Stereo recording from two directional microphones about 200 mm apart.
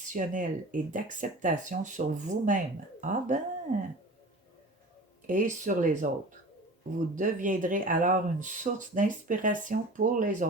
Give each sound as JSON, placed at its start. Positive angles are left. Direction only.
{"t": 0.0, "sound": "speech", "side_deg": -40}
{"t": 5.2, "sound": "speech", "side_deg": -40}
{"t": 7.2, "sound": "speech", "side_deg": -40}